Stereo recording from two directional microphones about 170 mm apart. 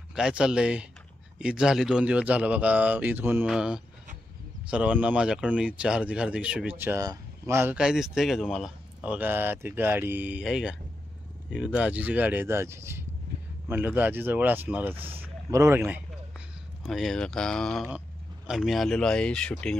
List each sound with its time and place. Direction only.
0.1 s speech: 5° right (ahead or behind)
15.0 s speech: 35° right (ahead or behind)
15.5 s a sound: 15° right (ahead or behind)
16.8 s speech: centre (ahead or behind)